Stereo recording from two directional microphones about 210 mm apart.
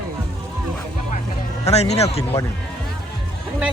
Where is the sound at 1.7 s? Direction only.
30° left (ahead or behind).